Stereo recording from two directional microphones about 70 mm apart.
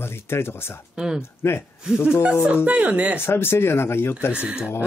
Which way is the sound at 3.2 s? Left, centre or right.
Left.